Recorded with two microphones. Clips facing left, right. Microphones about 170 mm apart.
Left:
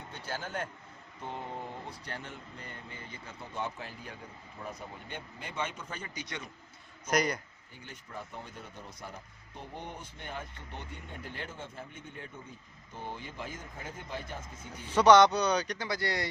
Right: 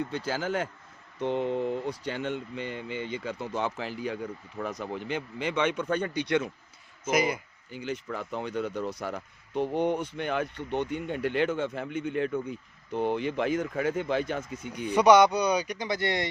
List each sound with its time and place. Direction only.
0.1 s speech: 90° right; by 6.1 s 70° right (ahead or behind)
6.2 s speech: 90° right
7.1 s a man's voice: 5° right (ahead or behind)
7.7 s speech: 90° right; by 14.7 s 75° right (ahead or behind)
14.9 s speech: 10° right (ahead or behind)
15.9 s speech: 20° right (ahead or behind)